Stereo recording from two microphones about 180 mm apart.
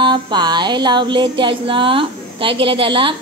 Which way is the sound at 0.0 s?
25° right (ahead or behind).